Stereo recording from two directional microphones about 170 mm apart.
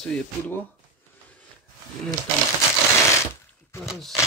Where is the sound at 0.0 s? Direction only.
5° left (ahead or behind).